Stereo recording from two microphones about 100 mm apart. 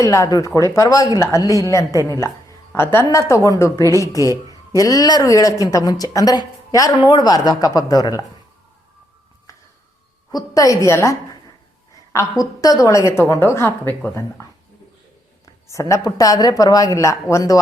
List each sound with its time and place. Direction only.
0.0 s a woman's voice: 30° left (ahead or behind)
6.9 s a woman's voice: 45° left (ahead or behind)
9.5 s music: 35° left (ahead or behind)
10.3 s a woman's voice: 35° left (ahead or behind)
15.7 s a woman's voice: 30° left (ahead or behind)